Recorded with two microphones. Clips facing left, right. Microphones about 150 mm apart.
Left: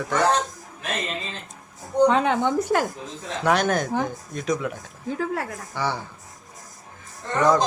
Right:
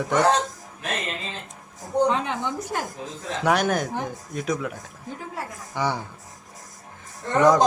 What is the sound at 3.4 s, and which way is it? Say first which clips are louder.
Speech: left 1 dB; 10° right (ahead or behind).